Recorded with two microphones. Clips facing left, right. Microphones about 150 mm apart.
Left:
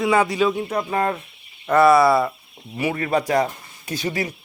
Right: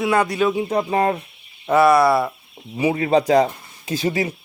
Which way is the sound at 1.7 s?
Centre (ahead or behind).